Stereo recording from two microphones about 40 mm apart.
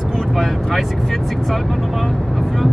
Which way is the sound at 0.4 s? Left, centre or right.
Centre.